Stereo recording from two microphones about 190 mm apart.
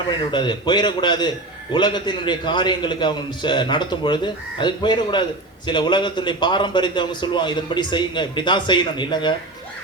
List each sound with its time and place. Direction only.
0.1 s a man's voice: 25° left (ahead or behind)